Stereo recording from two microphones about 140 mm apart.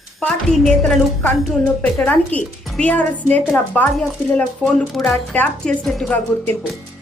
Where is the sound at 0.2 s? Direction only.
5° left (ahead or behind).